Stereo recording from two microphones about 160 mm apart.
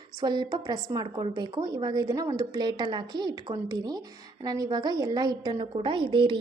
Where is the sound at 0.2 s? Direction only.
25° right (ahead or behind).